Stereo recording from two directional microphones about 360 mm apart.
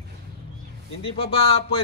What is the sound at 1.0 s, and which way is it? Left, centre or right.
Speech, centre.